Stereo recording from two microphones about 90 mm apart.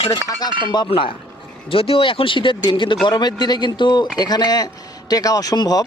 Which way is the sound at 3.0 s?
50° left (ahead or behind).